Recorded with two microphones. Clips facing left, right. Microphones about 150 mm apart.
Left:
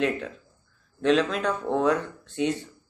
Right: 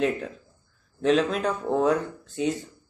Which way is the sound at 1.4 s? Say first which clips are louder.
Right 1 dB; 40° right (ahead or behind).